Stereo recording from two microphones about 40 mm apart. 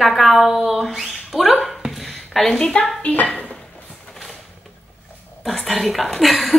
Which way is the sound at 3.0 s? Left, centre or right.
Left.